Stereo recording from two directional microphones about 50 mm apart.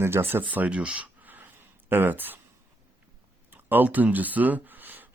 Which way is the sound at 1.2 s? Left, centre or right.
Right.